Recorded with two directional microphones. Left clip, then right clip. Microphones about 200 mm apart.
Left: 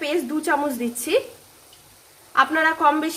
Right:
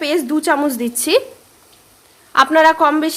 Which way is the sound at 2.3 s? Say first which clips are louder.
Right 8 dB; 45° right (ahead or behind).